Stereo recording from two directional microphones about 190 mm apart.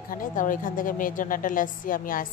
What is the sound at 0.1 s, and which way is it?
Speech, 45° left (ahead or behind).